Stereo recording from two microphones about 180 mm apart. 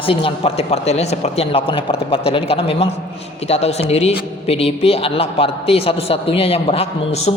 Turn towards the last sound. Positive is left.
turn(degrees=35)  # may be behind; listen again after turning